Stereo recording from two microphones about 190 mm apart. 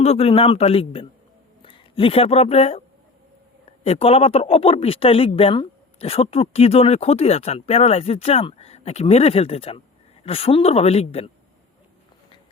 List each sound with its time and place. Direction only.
0.0 s speech: 35° left (ahead or behind)